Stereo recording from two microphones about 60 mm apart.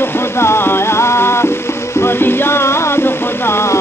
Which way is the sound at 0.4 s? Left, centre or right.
Left.